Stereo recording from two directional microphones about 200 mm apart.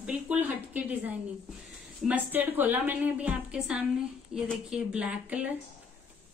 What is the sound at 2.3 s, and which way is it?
A woman's voice, 10° right (ahead or behind).